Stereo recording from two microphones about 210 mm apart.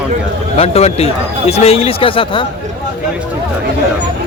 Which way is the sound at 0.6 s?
30° left (ahead or behind).